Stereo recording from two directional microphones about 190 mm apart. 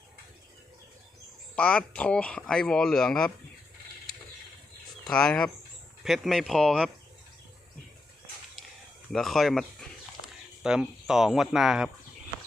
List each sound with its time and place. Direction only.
1.5 s speech: 5° left (ahead or behind)
5.0 s speech: 5° left (ahead or behind)
9.1 s speech: centre (ahead or behind)